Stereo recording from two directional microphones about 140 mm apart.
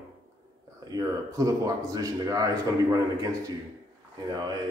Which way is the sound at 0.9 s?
25° right (ahead or behind).